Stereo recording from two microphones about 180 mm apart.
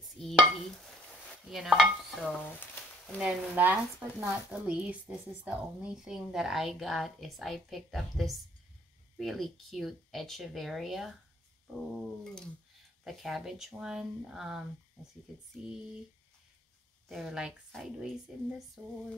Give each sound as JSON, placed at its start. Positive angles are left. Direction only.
{"t": 0.0, "sound": "dishes", "side_deg": 0}
{"t": 1.5, "sound": "speech", "side_deg": 0}
{"t": 2.3, "sound": "a sound", "side_deg": 10}
{"t": 3.2, "sound": "speech", "side_deg": -10}
{"t": 17.1, "sound": "speech", "side_deg": 0}